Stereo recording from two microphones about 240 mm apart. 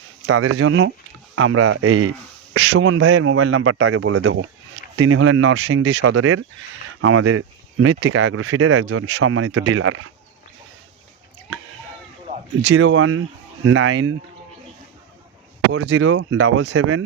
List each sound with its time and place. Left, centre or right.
0.3 s a man's voice: right
7.0 s a man's voice: right
12.3 s a sound: right
12.6 s a man's voice: right
15.7 s a man's voice: right